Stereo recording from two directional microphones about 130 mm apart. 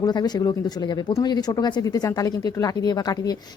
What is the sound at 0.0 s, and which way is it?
Speech, 30° left (ahead or behind).